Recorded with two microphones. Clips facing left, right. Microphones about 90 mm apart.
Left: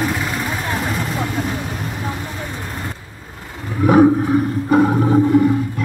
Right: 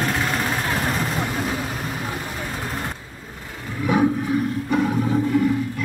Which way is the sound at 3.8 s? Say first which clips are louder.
Left 8 dB; 40° left (ahead or behind).